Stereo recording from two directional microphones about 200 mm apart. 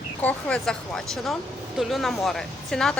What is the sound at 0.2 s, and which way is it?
Speech, 5° left (ahead or behind).